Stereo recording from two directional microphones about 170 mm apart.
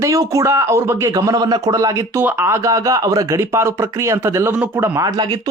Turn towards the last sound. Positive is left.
turn(degrees=-20)  # may be behind; listen again after turning